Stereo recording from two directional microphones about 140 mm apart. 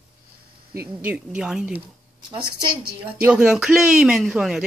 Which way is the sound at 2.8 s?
10° right (ahead or behind).